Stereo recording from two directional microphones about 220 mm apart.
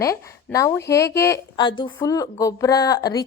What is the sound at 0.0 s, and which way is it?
A woman's voice, 15° left (ahead or behind).